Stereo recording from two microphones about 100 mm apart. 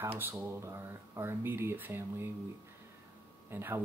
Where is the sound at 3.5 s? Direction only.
25° right (ahead or behind).